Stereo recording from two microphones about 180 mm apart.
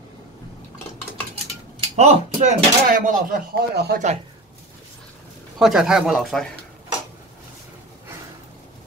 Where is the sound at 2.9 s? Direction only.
50° right (ahead or behind).